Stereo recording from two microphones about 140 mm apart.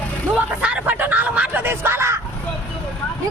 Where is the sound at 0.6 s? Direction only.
10° right (ahead or behind).